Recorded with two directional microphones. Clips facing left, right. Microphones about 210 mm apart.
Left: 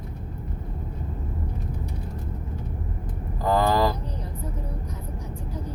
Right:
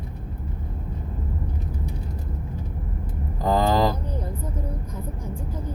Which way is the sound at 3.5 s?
20° right (ahead or behind).